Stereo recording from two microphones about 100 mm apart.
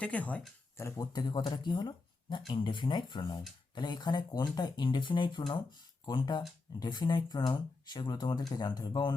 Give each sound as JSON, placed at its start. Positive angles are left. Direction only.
{"t": 0.0, "sound": "speech", "side_deg": 15}
{"t": 0.8, "sound": "speech", "side_deg": 25}
{"t": 1.1, "sound": "speech", "side_deg": 50}